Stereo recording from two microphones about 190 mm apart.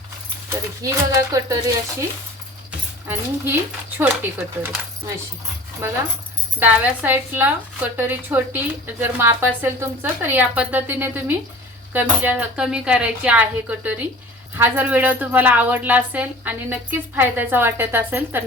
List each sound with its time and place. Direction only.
0.8 s speech: 15° right (ahead or behind)
3.1 s speech: 10° right (ahead or behind)
6.6 s speech: 10° right (ahead or behind)